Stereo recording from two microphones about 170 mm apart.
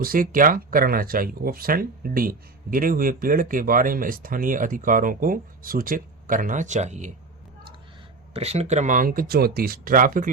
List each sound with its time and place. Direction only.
0.0 s speech: 55° right (ahead or behind)
8.3 s speech: 35° right (ahead or behind); by 10.2 s 55° right (ahead or behind)